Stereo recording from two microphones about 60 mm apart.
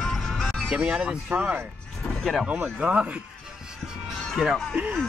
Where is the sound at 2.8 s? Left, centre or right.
Right.